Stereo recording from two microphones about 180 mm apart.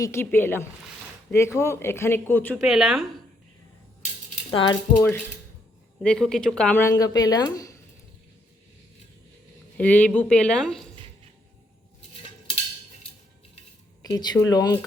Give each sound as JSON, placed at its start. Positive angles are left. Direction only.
{"t": 0.0, "sound": "speech", "side_deg": 15}
{"t": 2.6, "sound": "speech", "side_deg": 0}
{"t": 4.5, "sound": "speech", "side_deg": 25}
{"t": 4.9, "sound": "speech", "side_deg": 10}
{"t": 7.0, "sound": "speech", "side_deg": 20}
{"t": 9.7, "sound": "speech", "side_deg": 10}
{"t": 14.0, "sound": "speech", "side_deg": 20}